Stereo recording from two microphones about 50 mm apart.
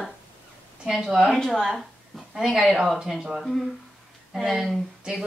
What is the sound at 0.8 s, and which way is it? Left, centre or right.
A woman's voice, centre.